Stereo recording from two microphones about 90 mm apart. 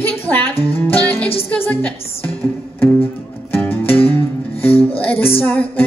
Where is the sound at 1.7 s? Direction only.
15° left (ahead or behind).